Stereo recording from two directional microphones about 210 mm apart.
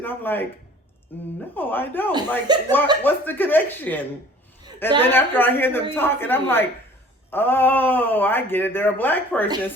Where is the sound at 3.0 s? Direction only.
10° left (ahead or behind).